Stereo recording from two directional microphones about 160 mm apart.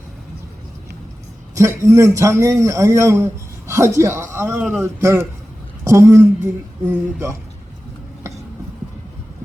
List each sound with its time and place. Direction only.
1.5 s a man's voice: 20° right (ahead or behind)